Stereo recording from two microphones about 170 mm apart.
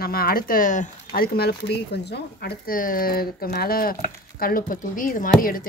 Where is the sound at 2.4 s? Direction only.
55° left (ahead or behind).